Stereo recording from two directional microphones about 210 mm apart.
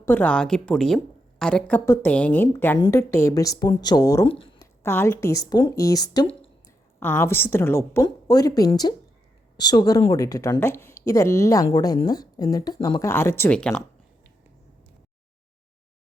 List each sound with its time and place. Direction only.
0.0 s a woman's voice: 10° left (ahead or behind)
7.0 s speech: 10° left (ahead or behind)